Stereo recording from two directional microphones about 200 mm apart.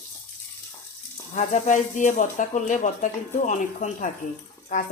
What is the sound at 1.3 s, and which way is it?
A woman's voice, 35° left (ahead or behind).